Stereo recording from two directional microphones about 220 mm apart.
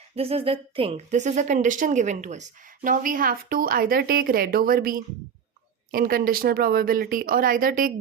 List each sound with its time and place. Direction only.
0.2 s speech: 25° right (ahead or behind)